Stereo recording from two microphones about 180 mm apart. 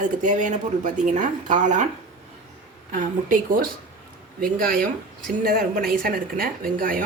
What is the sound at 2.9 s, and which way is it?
A woman's voice, 45° right (ahead or behind).